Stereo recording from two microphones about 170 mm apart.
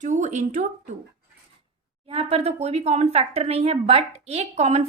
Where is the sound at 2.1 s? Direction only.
35° right (ahead or behind).